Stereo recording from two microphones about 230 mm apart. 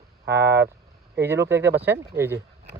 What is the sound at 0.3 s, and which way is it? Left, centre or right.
Vehicle, right.